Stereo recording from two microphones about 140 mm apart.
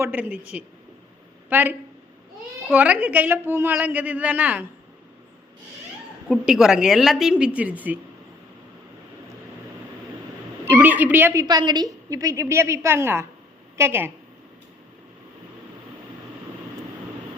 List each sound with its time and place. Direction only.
0.0 s a woman's voice: 10° right (ahead or behind)
6.2 s a woman's voice: centre (ahead or behind)
10.7 s a woman's voice: 10° right (ahead or behind)
11.4 s a woman's voice: 30° right (ahead or behind)